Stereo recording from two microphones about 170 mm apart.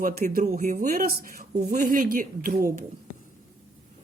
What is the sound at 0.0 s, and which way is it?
Speech, 65° right (ahead or behind).